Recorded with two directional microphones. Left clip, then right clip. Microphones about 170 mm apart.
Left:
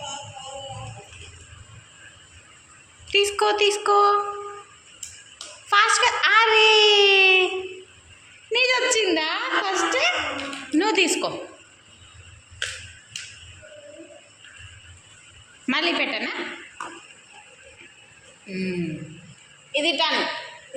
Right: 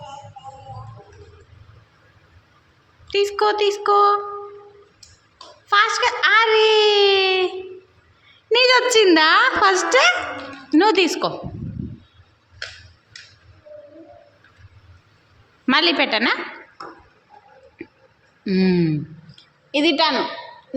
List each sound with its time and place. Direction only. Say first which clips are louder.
3.1 s a woman's voice: right 2 dB; 20° right (ahead or behind)
5.6 s a sound: right 1 dB; 20° right (ahead or behind)
8.4 s a sound: right 5 dB; 45° right (ahead or behind)
10.7 s speech: right 5 dB; 40° right (ahead or behind)
15.6 s a woman's voice: right 6 dB; 40° right (ahead or behind)
18.4 s a woman's voice: right 10 dB; 55° right (ahead or behind)